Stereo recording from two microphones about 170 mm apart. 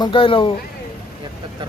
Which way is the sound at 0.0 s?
30° left (ahead or behind).